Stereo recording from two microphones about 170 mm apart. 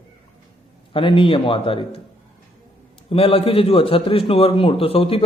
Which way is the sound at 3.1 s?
35° left (ahead or behind).